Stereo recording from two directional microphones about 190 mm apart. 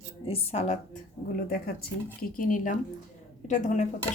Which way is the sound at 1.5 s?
55° left (ahead or behind).